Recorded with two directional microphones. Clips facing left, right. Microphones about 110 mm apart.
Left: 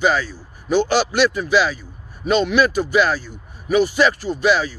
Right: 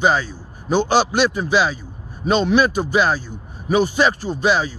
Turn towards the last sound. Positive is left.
turn(degrees=-30)  # may be behind; listen again after turning